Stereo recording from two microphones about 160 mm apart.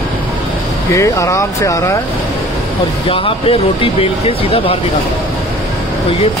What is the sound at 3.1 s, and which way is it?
Speech, 35° left (ahead or behind).